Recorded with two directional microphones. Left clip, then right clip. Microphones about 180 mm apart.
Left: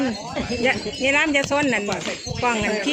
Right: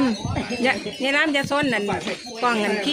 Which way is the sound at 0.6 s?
35° right (ahead or behind).